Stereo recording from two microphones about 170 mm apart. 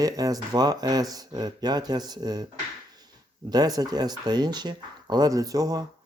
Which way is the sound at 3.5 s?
25° right (ahead or behind).